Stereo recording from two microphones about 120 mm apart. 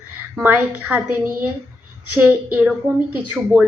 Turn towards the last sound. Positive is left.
turn(degrees=-15)  # may be behind; listen again after turning